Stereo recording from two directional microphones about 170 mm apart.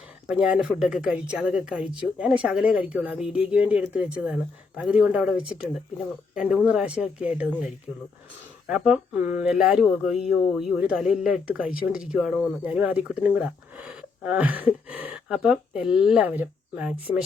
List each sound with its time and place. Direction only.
0.3 s speech: 5° right (ahead or behind)
11.6 s speech: 60° left (ahead or behind)
11.9 s speech: 5° right (ahead or behind)